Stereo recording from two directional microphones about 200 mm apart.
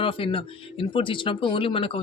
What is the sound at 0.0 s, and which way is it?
Speech, 25° left (ahead or behind).